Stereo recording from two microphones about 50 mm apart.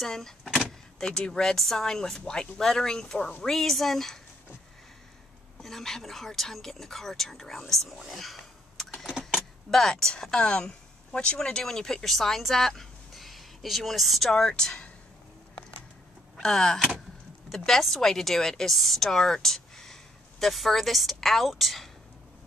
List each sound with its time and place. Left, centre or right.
0.0 s speech: centre
5.6 s speech: centre
8.0 s a sound: centre
9.7 s speech: centre
14.3 s speech: centre
16.3 s speech: centre